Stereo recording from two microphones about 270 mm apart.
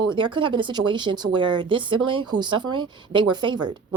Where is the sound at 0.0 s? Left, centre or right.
Centre.